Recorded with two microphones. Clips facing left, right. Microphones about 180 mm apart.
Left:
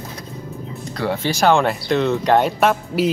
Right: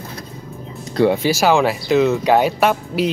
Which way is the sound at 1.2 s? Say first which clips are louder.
Right 1 dB; 5° right (ahead or behind).